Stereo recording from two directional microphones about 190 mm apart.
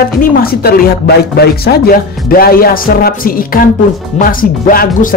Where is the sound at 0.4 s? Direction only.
50° left (ahead or behind).